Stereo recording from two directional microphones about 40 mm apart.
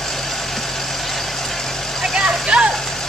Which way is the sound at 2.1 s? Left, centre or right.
Right.